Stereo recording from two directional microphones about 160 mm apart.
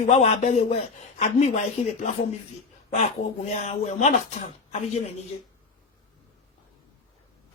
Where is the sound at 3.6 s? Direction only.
45° left (ahead or behind).